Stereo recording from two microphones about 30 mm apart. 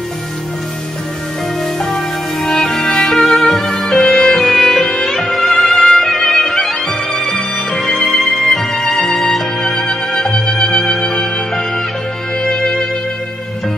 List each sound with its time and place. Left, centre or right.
1.8 s music: centre
4.1 s music: centre
6.3 s music: centre
7.1 s music: centre
8.9 s music: left
9.6 s music: centre
10.3 s music: left
12.4 s music: left